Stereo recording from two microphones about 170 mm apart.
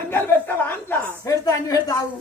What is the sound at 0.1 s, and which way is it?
A woman's voice, 10° left (ahead or behind).